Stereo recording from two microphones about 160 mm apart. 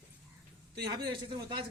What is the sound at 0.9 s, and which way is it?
Speech, 30° right (ahead or behind).